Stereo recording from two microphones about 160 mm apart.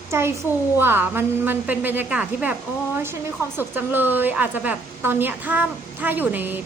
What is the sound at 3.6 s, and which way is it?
A woman's voice, 10° right (ahead or behind).